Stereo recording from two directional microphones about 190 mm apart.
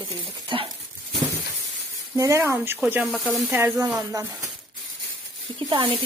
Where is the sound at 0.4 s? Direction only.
25° right (ahead or behind).